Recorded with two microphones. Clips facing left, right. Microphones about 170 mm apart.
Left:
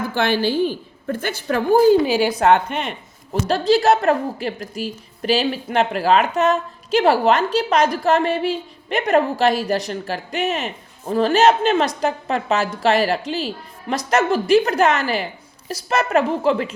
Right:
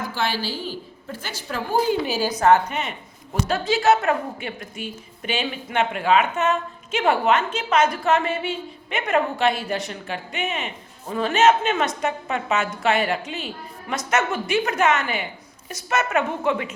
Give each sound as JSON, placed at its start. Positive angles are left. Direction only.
{"t": 0.1, "sound": "a woman's voice", "side_deg": 55}
{"t": 3.4, "sound": "a woman's voice", "side_deg": 35}